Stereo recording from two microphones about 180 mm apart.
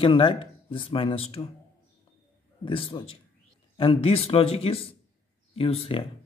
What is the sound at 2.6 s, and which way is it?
Speech, 30° left (ahead or behind).